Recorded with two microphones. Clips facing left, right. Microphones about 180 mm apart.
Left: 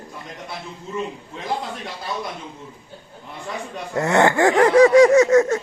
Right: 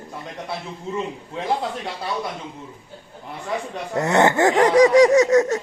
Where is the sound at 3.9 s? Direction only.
20° right (ahead or behind).